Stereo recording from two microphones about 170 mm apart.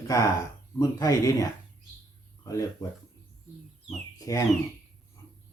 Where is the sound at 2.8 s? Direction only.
20° left (ahead or behind).